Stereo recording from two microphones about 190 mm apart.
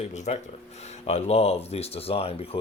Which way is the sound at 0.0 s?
35° left (ahead or behind).